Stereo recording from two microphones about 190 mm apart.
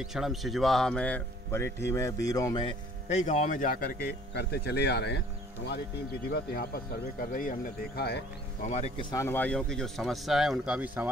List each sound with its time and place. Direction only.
0.0 s speech: centre (ahead or behind); by 2.7 s 20° left (ahead or behind)
3.1 s a man's voice: 40° left (ahead or behind)
4.3 s speech: 60° left (ahead or behind)
6.3 s speech: 55° left (ahead or behind)
8.9 s speech: 15° left (ahead or behind); by 11.1 s 5° right (ahead or behind)